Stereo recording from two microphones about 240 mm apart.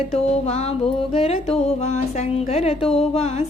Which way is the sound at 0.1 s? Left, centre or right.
Left.